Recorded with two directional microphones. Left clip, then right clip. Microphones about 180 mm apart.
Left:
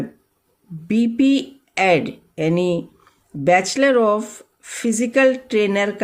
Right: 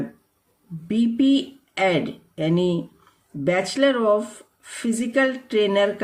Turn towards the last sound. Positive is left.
turn(degrees=40)  # may be behind; listen again after turning